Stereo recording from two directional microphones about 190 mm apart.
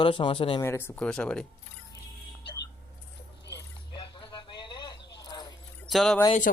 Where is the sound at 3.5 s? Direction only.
25° left (ahead or behind).